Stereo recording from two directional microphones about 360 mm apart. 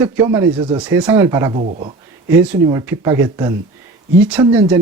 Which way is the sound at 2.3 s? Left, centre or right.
Centre.